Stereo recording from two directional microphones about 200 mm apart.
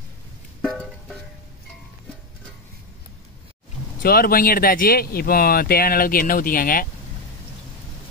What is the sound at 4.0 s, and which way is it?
Speech, 45° left (ahead or behind).